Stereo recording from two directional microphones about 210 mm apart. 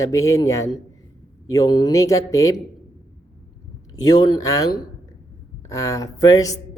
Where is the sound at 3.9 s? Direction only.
15° left (ahead or behind).